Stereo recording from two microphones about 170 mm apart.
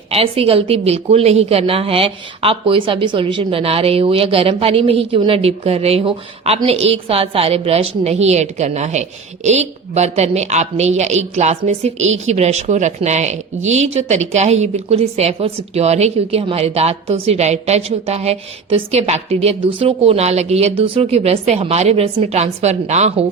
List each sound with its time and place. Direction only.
0.1 s a woman's voice: 35° right (ahead or behind)